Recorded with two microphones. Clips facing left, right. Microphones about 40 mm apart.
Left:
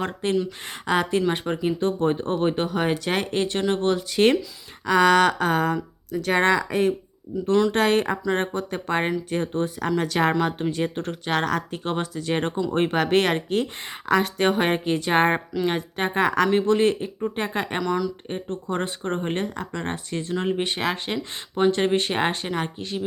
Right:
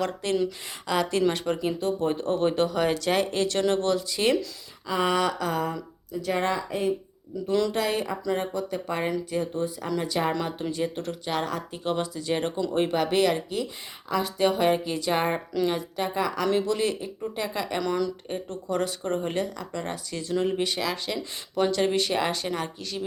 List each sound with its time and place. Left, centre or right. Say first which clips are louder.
0.0 s speech: left 1 dB; left
1.3 s speech: left 2 dB; left
1.8 s speech: left 3 dB; left
4.9 s speech: left 7 dB; left
7.3 s speech: left 4 dB; centre
7.7 s speech: left 6 dB; left
16.5 s speech: left 5 dB; left
17.8 s speech: left 1 dB; centre
18.3 s speech: left 2 dB; left